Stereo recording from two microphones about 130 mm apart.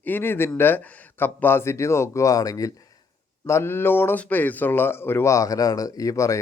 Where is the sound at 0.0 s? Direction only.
15° left (ahead or behind).